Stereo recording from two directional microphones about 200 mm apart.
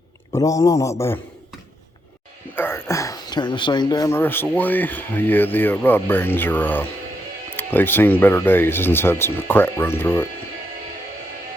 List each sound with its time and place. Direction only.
0.3 s speech: 15° left (ahead or behind)
2.6 s speech: 10° left (ahead or behind)